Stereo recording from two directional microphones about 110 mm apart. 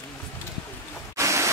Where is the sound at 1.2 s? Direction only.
25° right (ahead or behind).